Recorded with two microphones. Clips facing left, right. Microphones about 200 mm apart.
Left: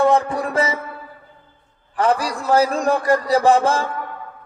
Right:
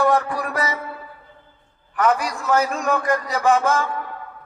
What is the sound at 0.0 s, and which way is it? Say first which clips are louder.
Music: left 3 dB; 25° left (ahead or behind).